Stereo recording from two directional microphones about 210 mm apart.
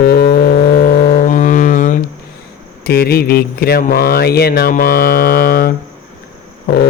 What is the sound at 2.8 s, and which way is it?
Speech, 50° left (ahead or behind).